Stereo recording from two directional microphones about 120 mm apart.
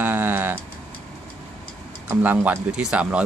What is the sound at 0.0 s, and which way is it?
Tick-tock, 15° right (ahead or behind).